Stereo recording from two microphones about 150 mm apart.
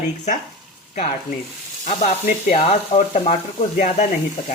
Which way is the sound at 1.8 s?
50° left (ahead or behind).